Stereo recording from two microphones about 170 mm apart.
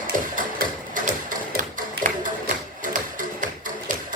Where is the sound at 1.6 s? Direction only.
50° right (ahead or behind).